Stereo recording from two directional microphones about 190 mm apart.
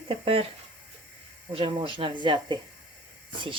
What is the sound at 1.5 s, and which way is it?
Speech, 25° right (ahead or behind).